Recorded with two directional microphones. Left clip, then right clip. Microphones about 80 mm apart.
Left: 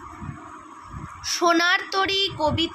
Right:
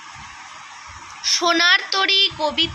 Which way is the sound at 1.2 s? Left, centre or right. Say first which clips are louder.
Right 4 dB; left.